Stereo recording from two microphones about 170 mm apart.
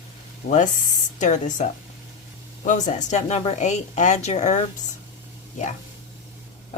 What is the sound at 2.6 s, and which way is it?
A woman's voice, 45° left (ahead or behind).